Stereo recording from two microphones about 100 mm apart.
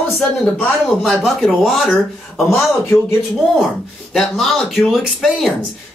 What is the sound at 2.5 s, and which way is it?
Speech, 25° left (ahead or behind).